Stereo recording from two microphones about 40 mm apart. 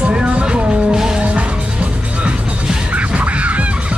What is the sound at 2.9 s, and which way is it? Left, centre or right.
Music, right.